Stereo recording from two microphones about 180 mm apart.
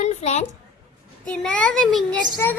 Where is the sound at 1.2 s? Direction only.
5° left (ahead or behind).